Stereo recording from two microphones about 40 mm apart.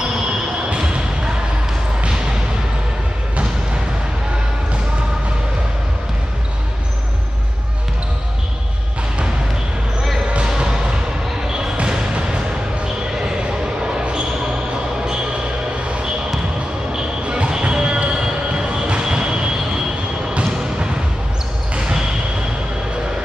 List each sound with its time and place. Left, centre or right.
10.3 s basketball bounce: right
14.0 s basketball bounce: right
16.9 s a sound: centre